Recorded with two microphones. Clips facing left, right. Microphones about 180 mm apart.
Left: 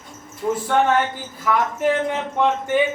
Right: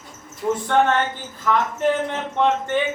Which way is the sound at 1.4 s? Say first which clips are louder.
Even; 10° left (ahead or behind).